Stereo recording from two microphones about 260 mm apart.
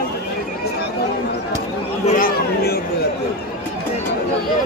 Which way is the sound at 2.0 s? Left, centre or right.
Left.